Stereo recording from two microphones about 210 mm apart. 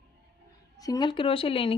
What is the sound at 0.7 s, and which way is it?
A woman's voice, 20° left (ahead or behind).